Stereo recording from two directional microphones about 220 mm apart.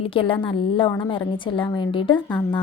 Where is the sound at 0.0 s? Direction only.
25° left (ahead or behind).